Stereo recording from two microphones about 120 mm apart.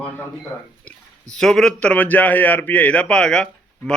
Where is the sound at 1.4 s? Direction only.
5° left (ahead or behind).